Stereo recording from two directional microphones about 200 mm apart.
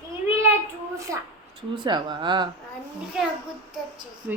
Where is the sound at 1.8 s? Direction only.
25° right (ahead or behind).